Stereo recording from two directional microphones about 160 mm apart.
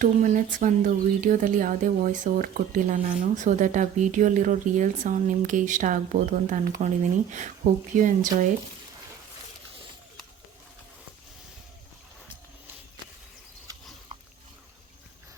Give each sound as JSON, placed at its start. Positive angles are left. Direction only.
{"t": 0.0, "sound": "speech", "side_deg": -55}